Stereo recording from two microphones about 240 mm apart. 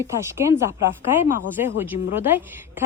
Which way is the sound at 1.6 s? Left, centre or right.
Centre.